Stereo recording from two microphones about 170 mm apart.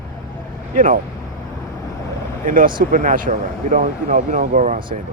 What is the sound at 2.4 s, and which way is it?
Speech, 55° right (ahead or behind).